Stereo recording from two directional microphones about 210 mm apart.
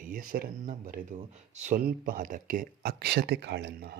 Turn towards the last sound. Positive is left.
turn(degrees=-50)  # may be behind; listen again after turning